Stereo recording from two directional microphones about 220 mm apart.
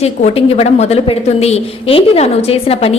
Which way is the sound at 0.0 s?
30° left (ahead or behind).